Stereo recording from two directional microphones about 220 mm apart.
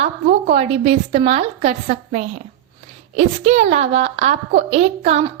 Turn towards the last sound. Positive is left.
turn(degrees=-30)  # may be behind; listen again after turning